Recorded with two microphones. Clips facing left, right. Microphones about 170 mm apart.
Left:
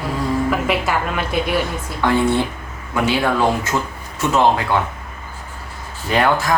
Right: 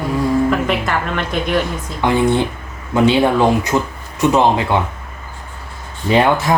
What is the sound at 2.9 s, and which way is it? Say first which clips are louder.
Speech: right 5 dB; 25° right (ahead or behind).